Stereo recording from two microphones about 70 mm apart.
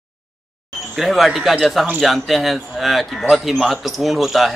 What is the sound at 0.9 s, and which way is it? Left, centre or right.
Speech, centre.